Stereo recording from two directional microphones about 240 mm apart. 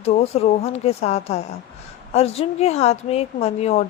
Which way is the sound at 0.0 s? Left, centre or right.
Left.